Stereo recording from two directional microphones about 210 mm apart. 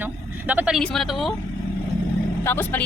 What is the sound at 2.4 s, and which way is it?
Speech, 10° left (ahead or behind).